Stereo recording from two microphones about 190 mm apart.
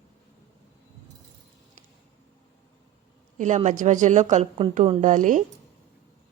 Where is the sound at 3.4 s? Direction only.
40° right (ahead or behind).